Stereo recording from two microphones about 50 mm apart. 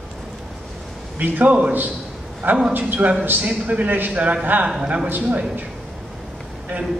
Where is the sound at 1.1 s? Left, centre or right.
Right.